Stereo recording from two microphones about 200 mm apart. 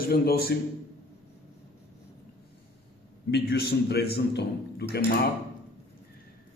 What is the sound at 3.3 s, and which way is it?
A man's voice, 55° left (ahead or behind).